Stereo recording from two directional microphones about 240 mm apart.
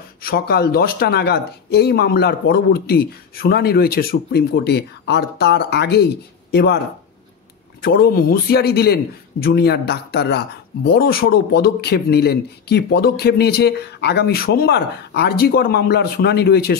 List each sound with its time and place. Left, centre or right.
0.2 s a man's voice: left
7.8 s a man's voice: left